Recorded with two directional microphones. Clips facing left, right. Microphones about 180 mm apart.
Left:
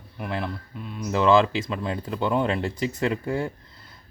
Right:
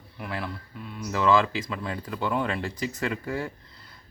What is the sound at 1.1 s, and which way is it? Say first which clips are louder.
Speech: left 4 dB; 25° left (ahead or behind).